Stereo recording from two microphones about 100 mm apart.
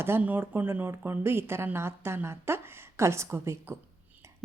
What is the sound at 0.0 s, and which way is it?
Speech, 20° right (ahead or behind).